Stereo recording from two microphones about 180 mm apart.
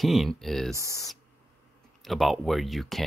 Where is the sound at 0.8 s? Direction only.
15° right (ahead or behind).